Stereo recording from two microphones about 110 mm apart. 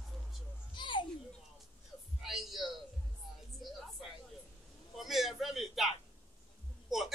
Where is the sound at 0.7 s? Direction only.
45° left (ahead or behind).